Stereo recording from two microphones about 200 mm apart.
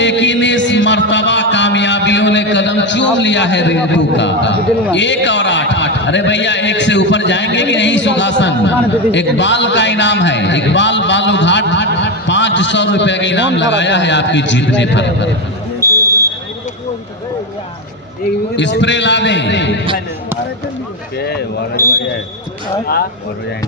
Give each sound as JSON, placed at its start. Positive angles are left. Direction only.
{"t": 0.0, "sound": "music", "side_deg": 65}
{"t": 4.9, "sound": "a man's voice", "side_deg": 65}
{"t": 15.8, "sound": "basketball bounce", "side_deg": -15}
{"t": 18.5, "sound": "a man's voice", "side_deg": 65}
{"t": 21.2, "sound": "a man's voice", "side_deg": 55}
{"t": 21.8, "sound": "speech", "side_deg": -15}